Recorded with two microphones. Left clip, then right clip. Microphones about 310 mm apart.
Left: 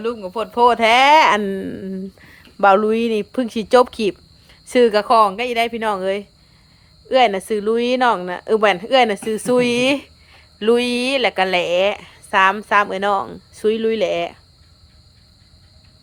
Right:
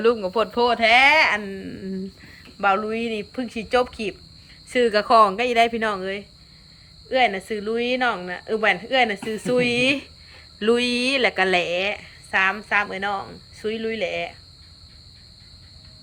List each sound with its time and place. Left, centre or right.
0.0 s speech: centre